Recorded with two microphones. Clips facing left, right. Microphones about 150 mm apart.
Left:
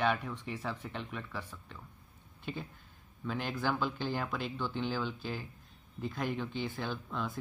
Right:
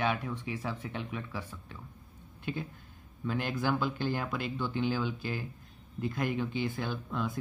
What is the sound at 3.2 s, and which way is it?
Speech, 5° right (ahead or behind).